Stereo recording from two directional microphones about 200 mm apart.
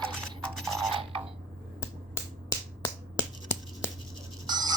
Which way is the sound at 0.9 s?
25° right (ahead or behind).